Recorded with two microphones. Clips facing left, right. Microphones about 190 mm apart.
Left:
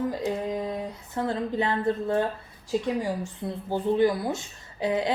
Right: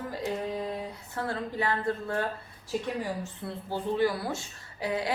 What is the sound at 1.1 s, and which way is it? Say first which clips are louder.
Speech: left 6 dB; 20° left (ahead or behind).